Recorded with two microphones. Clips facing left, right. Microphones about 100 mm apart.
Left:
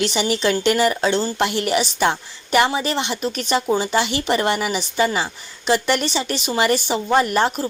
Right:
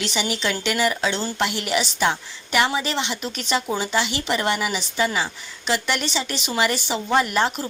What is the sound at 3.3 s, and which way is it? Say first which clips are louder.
A woman's voice: left 4 dB; 45° left (ahead or behind).